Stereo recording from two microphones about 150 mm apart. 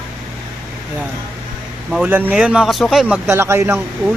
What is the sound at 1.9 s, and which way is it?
Speech, 10° right (ahead or behind).